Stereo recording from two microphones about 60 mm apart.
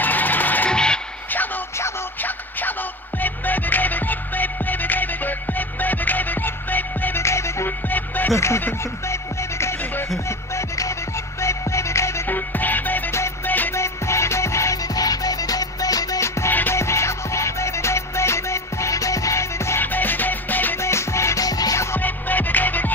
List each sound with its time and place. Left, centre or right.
0.0 s music: left
0.7 s music: centre
3.2 s music: left
7.2 s music: left
8.4 s speech: left
9.1 s music: left
12.3 s music: left
13.7 s music: left
14.8 s music: left
16.2 s music: left
19.8 s music: left
20.8 s music: left
21.4 s music: left
21.9 s music: left